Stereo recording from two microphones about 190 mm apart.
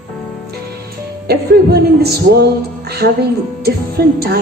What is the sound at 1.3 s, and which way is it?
Speech, 55° right (ahead or behind).